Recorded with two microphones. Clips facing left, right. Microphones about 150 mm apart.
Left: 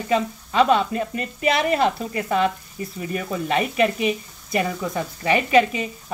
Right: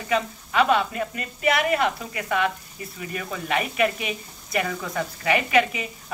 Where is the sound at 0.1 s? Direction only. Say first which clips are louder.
Left 2 dB; 30° left (ahead or behind).